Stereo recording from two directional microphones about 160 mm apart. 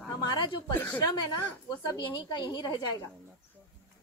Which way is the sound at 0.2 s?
25° left (ahead or behind).